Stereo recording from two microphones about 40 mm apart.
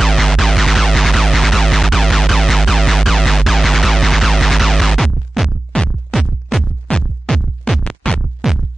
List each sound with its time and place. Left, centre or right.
0.0 s music: centre
7.3 s music: centre
8.4 s music: centre